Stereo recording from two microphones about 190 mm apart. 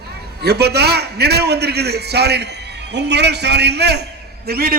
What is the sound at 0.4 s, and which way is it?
A man's voice, 60° right (ahead or behind).